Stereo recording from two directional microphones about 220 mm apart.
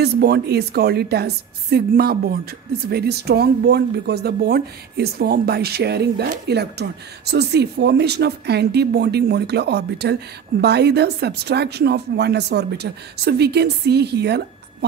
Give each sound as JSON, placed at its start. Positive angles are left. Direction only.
{"t": 0.0, "sound": "speech", "side_deg": -45}